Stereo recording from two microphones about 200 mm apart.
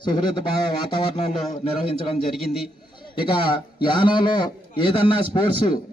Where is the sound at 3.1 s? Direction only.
25° left (ahead or behind).